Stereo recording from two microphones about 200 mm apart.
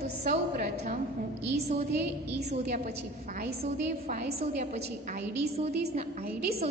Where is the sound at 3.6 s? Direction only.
35° right (ahead or behind).